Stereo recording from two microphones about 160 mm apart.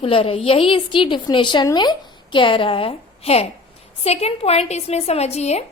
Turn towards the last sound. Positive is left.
turn(degrees=45)  # may be behind; listen again after turning